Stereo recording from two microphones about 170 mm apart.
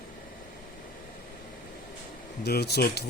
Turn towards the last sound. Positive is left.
turn(degrees=70)  # may be behind; listen again after turning